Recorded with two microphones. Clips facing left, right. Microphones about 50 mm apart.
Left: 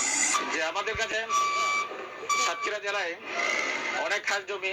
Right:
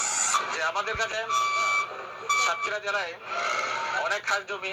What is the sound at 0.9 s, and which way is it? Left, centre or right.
Speech, left.